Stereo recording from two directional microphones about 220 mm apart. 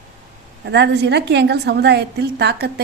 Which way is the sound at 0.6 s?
50° right (ahead or behind).